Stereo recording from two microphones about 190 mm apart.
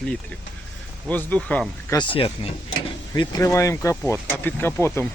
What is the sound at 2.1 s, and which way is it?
Speech, 30° left (ahead or behind).